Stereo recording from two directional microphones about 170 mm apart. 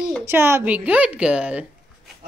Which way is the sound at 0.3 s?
15° right (ahead or behind).